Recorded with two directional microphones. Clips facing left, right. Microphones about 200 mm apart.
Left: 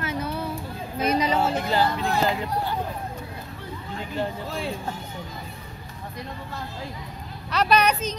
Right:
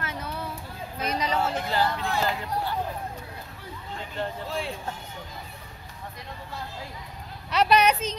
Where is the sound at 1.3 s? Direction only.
20° left (ahead or behind).